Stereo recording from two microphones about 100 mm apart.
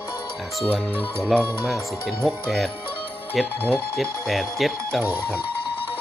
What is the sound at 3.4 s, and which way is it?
Speech, centre (ahead or behind).